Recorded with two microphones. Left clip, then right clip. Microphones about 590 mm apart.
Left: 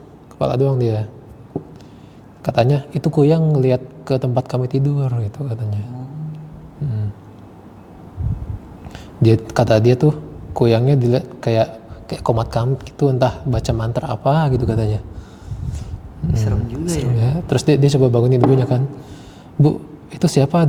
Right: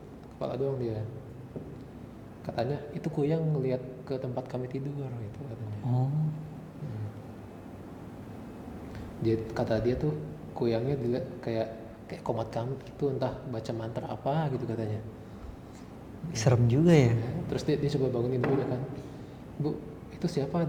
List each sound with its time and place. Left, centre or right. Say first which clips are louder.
0.3 s a man's voice: left 14 dB; left
2.4 s a man's voice: left 16 dB; left
8.9 s a man's voice: left 13 dB; left
16.3 s speech: left 1 dB; right
17.2 s a man's voice: left 14 dB; left
20.1 s a man's voice: left 15 dB; left